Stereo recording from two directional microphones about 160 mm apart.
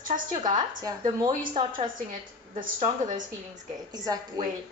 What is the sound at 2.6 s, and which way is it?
Speech, 55° right (ahead or behind).